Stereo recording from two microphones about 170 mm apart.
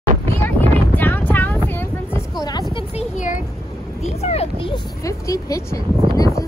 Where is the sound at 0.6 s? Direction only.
10° left (ahead or behind).